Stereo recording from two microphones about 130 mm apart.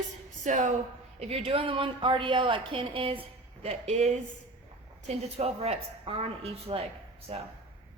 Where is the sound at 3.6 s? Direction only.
60° right (ahead or behind).